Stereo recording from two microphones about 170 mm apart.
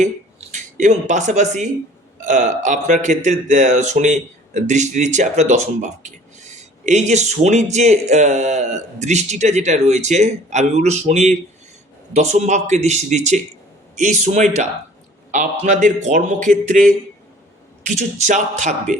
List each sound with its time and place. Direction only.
0.0 s speech: 45° right (ahead or behind)